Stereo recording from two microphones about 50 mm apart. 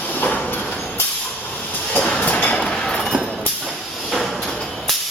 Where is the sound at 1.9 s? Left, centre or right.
Left.